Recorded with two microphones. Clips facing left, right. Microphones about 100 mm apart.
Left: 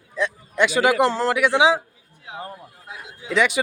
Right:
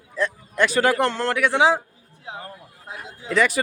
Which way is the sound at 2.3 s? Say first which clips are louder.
Even; 30° right (ahead or behind).